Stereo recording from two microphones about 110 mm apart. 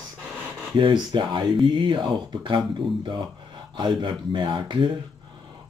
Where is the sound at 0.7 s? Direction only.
45° right (ahead or behind).